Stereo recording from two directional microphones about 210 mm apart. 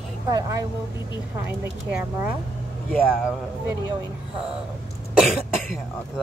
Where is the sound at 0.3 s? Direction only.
15° right (ahead or behind).